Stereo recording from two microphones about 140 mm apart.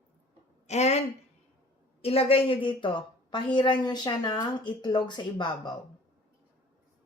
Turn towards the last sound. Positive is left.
turn(degrees=35)  # may be behind; listen again after turning